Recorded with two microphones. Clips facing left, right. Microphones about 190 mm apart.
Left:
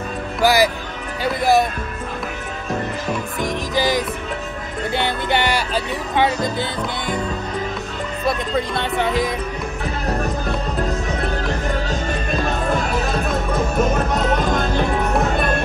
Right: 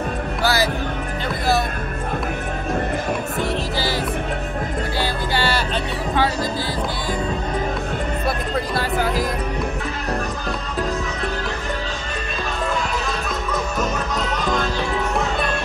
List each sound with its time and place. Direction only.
0.4 s speech: 15° left (ahead or behind)
3.3 s music: 15° left (ahead or behind)
8.3 s speech: centre (ahead or behind)
13.5 s music: 50° left (ahead or behind)